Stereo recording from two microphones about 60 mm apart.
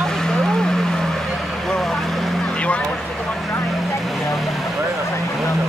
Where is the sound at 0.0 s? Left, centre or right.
Centre.